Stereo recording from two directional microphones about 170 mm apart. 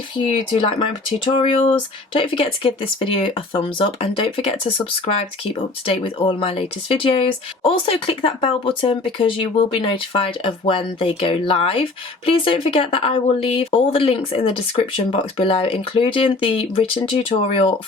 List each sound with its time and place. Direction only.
0.8 s speech: 30° left (ahead or behind)